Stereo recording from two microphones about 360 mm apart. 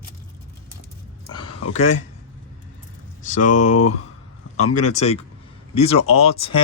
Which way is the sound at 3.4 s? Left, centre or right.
Left.